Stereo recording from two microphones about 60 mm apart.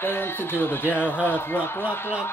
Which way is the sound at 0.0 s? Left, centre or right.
Left.